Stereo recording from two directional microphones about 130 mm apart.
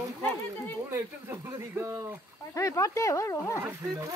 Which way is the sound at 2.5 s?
25° left (ahead or behind).